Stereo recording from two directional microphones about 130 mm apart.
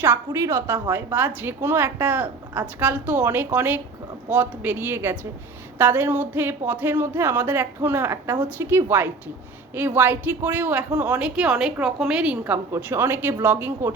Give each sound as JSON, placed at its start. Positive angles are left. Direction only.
{"t": 0.0, "sound": "speech", "side_deg": -15}